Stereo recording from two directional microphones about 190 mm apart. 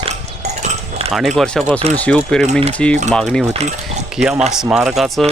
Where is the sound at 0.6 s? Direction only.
30° right (ahead or behind).